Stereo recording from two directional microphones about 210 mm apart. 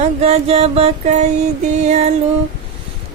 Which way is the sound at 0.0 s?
30° right (ahead or behind).